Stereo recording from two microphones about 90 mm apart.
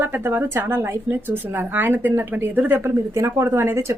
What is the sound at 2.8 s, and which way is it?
Speech, 30° right (ahead or behind).